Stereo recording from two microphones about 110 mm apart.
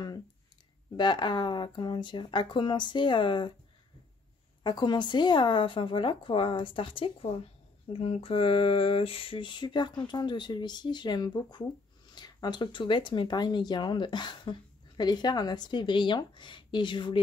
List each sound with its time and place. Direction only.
0.9 s speech: 40° left (ahead or behind)
4.6 s speech: 40° left (ahead or behind)